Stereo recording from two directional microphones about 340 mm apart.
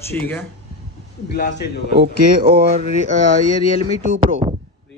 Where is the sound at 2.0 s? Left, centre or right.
Right.